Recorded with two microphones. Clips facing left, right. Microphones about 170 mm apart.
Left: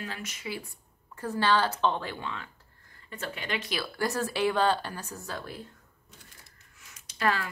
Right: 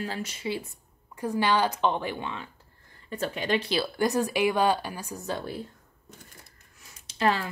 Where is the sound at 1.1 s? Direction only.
15° right (ahead or behind).